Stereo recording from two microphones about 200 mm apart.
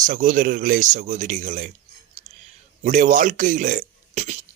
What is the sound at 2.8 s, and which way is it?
Speech, 40° right (ahead or behind).